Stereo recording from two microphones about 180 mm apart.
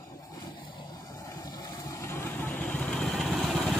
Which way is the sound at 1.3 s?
20° left (ahead or behind).